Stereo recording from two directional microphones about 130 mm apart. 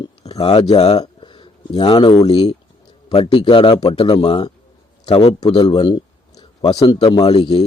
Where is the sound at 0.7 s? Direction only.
50° left (ahead or behind).